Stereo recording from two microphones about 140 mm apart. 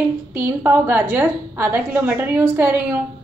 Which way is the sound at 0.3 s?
15° right (ahead or behind).